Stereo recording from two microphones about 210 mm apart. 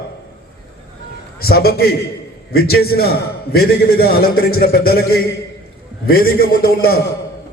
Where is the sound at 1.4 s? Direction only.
45° left (ahead or behind).